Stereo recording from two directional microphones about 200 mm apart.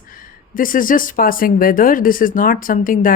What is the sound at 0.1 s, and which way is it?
Speech, 45° left (ahead or behind).